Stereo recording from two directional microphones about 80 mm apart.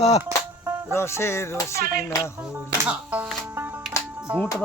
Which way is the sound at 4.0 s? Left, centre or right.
Left.